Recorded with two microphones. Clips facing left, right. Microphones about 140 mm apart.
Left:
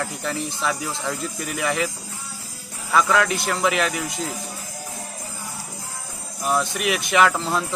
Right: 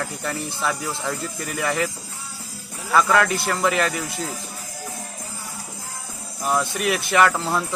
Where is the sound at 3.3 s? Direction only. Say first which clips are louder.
Even; 15° left (ahead or behind).